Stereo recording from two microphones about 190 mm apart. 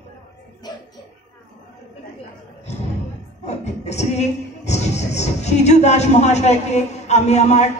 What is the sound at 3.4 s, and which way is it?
Music, 35° left (ahead or behind).